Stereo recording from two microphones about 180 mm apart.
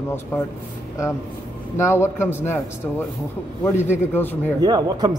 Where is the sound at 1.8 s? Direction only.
15° left (ahead or behind).